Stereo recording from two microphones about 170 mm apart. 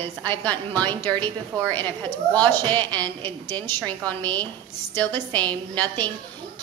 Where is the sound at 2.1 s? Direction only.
10° left (ahead or behind).